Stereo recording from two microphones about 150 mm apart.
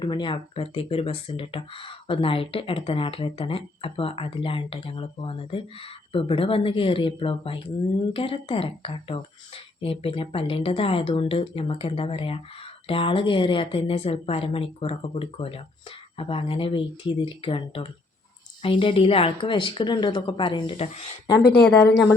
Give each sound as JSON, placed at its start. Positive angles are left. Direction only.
{"t": 0.0, "sound": "speech", "side_deg": 30}
{"t": 21.4, "sound": "speech", "side_deg": 90}